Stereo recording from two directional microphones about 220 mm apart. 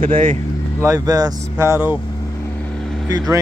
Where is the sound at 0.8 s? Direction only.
15° right (ahead or behind).